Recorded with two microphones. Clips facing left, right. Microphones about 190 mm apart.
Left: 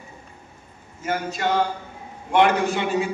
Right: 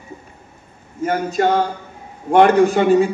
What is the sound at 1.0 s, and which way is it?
A man's voice, 45° right (ahead or behind).